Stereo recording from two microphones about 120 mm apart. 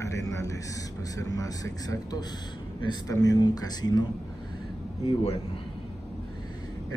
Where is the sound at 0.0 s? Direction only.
25° left (ahead or behind).